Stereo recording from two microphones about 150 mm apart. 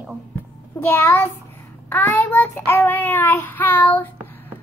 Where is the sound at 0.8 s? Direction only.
15° left (ahead or behind).